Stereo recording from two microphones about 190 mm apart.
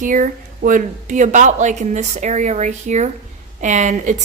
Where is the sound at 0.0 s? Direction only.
45° right (ahead or behind).